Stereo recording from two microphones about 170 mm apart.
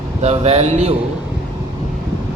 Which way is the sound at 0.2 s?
40° right (ahead or behind).